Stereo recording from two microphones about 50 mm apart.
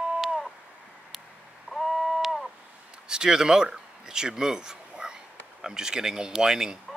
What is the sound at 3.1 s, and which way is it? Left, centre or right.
Speech, centre.